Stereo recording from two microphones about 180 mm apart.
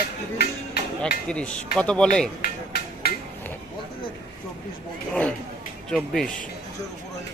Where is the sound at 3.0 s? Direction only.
60° left (ahead or behind).